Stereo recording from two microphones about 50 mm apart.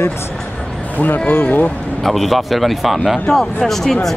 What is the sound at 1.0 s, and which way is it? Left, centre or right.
Speech, left.